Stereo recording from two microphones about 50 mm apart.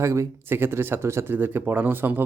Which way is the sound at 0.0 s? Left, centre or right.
Right.